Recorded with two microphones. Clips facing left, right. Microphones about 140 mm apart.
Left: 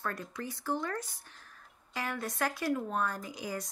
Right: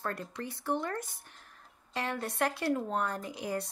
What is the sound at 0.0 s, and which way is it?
Speech, 30° right (ahead or behind).